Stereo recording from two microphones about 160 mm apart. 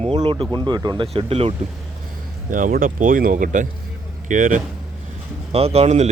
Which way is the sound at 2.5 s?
55° right (ahead or behind).